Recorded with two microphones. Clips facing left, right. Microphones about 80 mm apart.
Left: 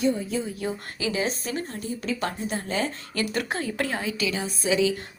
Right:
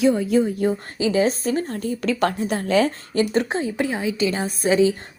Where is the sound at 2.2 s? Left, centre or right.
Right.